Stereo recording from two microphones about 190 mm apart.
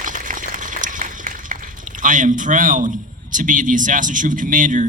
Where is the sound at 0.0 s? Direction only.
45° right (ahead or behind).